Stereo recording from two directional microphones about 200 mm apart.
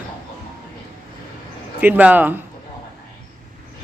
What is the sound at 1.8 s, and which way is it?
Speech, 10° right (ahead or behind).